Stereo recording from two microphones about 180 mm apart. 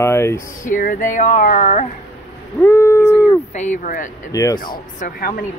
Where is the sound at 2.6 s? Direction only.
15° left (ahead or behind).